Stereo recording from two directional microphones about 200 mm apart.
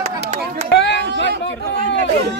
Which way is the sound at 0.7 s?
60° left (ahead or behind).